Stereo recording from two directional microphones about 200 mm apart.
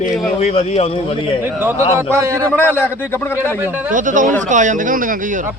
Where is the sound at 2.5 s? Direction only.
10° left (ahead or behind).